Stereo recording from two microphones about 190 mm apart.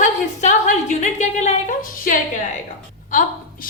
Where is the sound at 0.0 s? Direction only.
40° left (ahead or behind).